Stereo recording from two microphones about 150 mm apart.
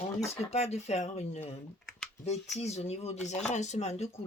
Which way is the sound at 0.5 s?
45° left (ahead or behind).